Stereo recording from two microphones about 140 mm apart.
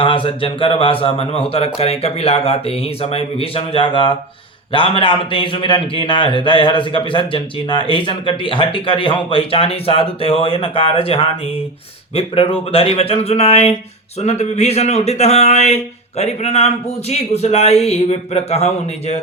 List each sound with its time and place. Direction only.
0.0 s a man's voice: 40° left (ahead or behind)